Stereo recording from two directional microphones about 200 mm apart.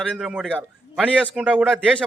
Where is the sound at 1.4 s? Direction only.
5° right (ahead or behind).